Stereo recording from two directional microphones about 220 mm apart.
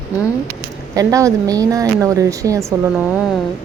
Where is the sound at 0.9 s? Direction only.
15° right (ahead or behind).